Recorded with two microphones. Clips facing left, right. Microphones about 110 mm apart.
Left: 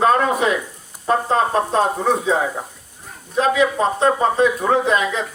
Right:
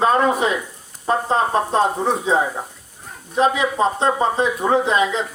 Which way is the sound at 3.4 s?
25° right (ahead or behind).